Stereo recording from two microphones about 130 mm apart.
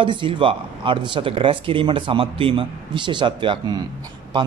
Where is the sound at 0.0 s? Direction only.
40° right (ahead or behind).